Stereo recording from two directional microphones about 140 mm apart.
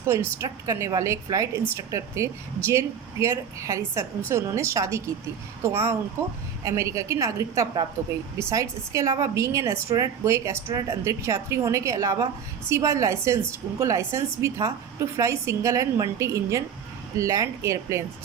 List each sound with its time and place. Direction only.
0.0 s a woman's voice: 20° right (ahead or behind)